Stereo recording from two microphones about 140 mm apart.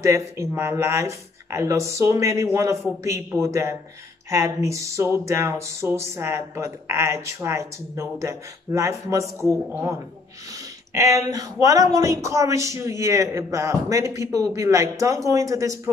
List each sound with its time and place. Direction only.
0.0 s speech: 20° right (ahead or behind)